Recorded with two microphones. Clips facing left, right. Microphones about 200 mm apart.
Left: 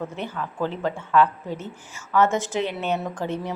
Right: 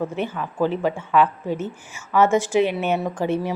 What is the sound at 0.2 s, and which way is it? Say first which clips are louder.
A woman's voice: right 4 dB; 15° right (ahead or behind).